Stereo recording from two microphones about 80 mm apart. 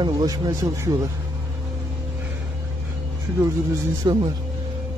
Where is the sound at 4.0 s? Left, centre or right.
Right.